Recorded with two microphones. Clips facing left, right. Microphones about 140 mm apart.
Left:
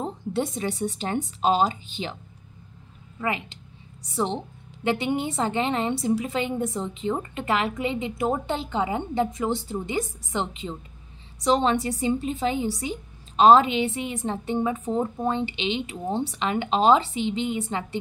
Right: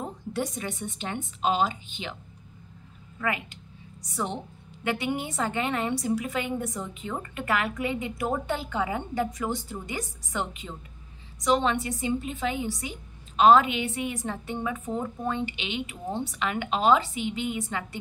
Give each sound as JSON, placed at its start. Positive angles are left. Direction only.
{"t": 0.0, "sound": "a woman's voice", "side_deg": 25}
{"t": 3.2, "sound": "a woman's voice", "side_deg": 25}